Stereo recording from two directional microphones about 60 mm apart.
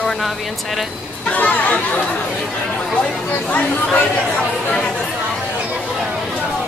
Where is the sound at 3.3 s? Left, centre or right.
Left.